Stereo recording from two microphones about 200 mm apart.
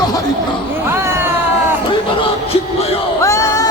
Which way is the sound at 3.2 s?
15° left (ahead or behind).